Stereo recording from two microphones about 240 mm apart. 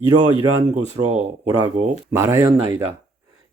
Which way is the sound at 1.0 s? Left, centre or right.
Right.